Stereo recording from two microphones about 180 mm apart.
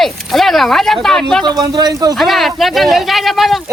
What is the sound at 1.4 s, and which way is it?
Speech, 20° right (ahead or behind).